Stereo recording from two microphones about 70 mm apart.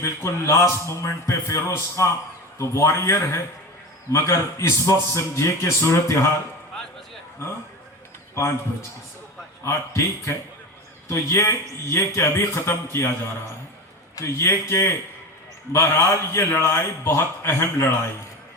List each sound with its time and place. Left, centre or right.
0.0 s a man's voice: left
9.6 s a man's voice: left
14.2 s a man's voice: left